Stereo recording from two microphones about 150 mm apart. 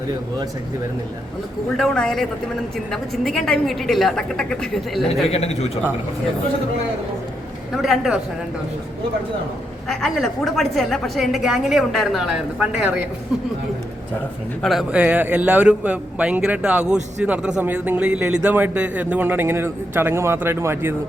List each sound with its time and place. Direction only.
1.7 s a woman's voice: centre (ahead or behind)
5.3 s a man's voice: 45° left (ahead or behind)
7.8 s a woman's voice: 5° right (ahead or behind)
9.9 s a woman's voice: centre (ahead or behind)
14.6 s a man's voice: centre (ahead or behind)